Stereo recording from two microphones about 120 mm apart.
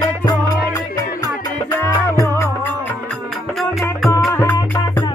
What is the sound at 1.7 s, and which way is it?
Music, 15° left (ahead or behind).